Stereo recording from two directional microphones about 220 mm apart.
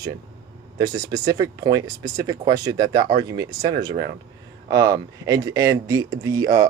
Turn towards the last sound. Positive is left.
turn(degrees=-15)  # may be behind; listen again after turning